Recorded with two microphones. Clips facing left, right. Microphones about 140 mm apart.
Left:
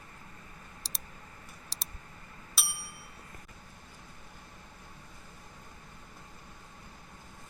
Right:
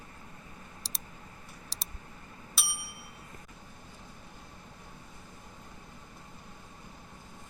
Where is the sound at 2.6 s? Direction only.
Centre (ahead or behind).